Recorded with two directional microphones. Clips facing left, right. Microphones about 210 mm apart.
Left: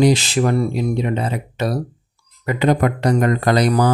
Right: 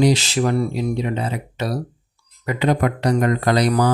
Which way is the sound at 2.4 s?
50° left (ahead or behind).